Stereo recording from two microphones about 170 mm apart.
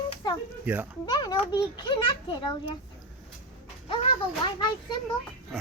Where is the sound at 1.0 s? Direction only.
25° left (ahead or behind).